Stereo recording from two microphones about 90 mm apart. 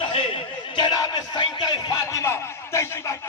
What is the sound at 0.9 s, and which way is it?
Music, 45° left (ahead or behind).